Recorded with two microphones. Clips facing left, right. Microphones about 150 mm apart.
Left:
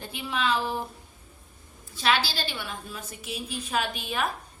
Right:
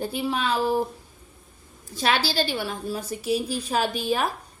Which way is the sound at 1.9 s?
40° right (ahead or behind).